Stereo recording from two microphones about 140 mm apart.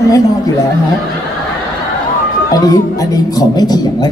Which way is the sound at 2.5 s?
25° left (ahead or behind).